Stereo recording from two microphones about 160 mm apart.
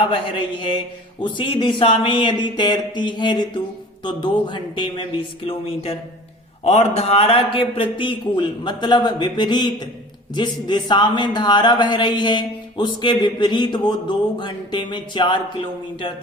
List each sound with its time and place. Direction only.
0.1 s a man's voice: 30° left (ahead or behind)